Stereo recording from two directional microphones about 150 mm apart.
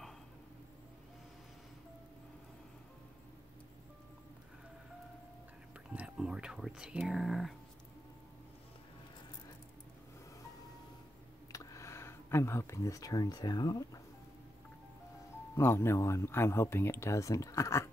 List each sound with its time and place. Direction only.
5.9 s speech: 10° right (ahead or behind)
11.5 s speech: 20° left (ahead or behind)
15.5 s speech: 15° left (ahead or behind)